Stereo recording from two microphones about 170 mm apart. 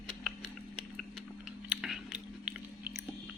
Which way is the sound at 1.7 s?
5° right (ahead or behind).